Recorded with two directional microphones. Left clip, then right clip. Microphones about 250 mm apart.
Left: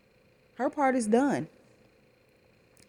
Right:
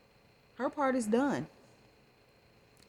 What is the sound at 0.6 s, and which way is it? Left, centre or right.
Speech, centre.